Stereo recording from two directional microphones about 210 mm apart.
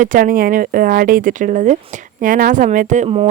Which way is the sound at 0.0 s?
40° right (ahead or behind).